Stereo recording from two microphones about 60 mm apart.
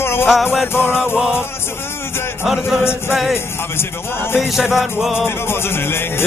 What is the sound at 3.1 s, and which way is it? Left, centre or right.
Music, centre.